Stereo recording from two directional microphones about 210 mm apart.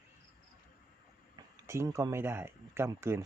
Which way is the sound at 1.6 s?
15° right (ahead or behind).